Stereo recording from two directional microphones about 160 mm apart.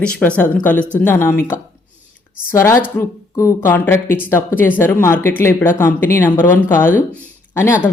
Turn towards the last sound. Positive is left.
turn(degrees=15)  # may be behind; listen again after turning